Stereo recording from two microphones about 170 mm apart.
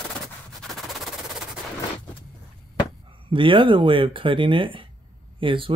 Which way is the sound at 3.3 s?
30° right (ahead or behind).